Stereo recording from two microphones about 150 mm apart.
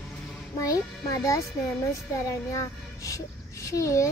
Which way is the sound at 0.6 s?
25° left (ahead or behind).